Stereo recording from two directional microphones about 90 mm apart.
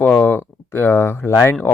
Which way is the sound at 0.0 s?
20° left (ahead or behind).